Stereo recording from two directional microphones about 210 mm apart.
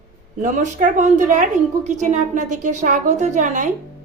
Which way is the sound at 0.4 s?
35° right (ahead or behind).